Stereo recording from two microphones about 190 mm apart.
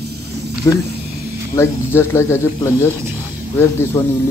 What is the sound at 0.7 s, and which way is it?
Speech, 15° left (ahead or behind).